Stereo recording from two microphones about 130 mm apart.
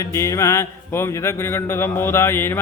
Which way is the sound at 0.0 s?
25° left (ahead or behind).